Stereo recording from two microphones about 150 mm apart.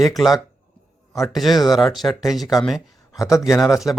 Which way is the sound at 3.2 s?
20° left (ahead or behind).